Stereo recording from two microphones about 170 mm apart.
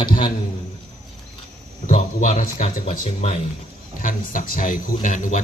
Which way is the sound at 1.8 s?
45° left (ahead or behind).